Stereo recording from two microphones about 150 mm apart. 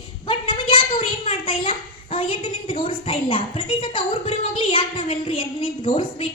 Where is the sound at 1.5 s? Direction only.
35° left (ahead or behind).